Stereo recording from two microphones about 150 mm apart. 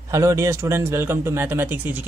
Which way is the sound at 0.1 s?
20° right (ahead or behind).